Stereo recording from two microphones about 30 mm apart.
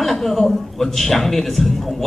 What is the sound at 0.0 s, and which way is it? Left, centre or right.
A man's voice, centre.